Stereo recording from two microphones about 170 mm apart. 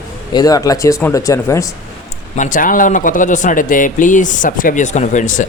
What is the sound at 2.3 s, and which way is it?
Speech, 50° left (ahead or behind).